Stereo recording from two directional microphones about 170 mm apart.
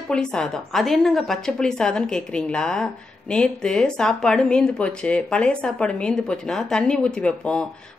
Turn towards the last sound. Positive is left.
turn(degrees=5)  # may be behind; listen again after turning